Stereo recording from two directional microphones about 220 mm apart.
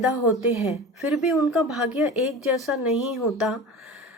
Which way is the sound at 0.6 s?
Centre (ahead or behind).